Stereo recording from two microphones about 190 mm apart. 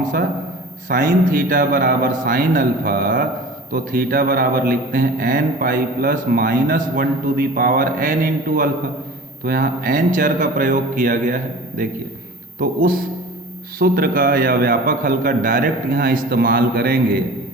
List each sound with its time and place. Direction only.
0.0 s a man's voice: 45° right (ahead or behind)
12.5 s speech: 50° right (ahead or behind)